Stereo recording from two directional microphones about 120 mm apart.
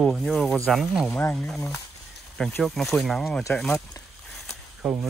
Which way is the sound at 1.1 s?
15° left (ahead or behind).